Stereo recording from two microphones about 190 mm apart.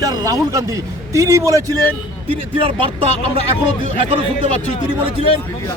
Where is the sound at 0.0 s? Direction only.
20° right (ahead or behind).